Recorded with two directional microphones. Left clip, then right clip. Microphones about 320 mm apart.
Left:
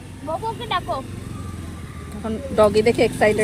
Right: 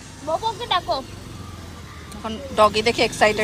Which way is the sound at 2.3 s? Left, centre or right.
Centre.